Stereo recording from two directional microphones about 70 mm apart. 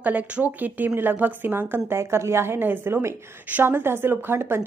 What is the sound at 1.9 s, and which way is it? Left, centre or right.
A woman's voice, right.